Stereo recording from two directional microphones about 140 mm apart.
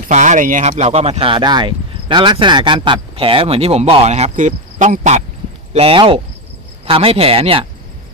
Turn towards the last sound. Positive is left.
turn(degrees=-40)  # may be behind; listen again after turning